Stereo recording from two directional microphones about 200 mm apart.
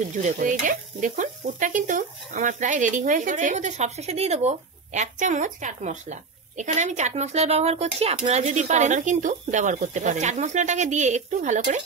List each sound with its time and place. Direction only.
0.2 s stir: 40° right (ahead or behind)